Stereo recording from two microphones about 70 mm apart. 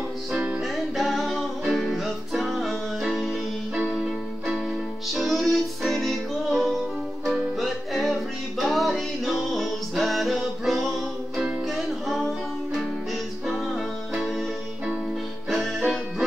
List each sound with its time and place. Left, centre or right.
0.3 s music: centre
0.6 s music: centre
4.5 s music: centre
13.5 s music: centre
15.5 s music: centre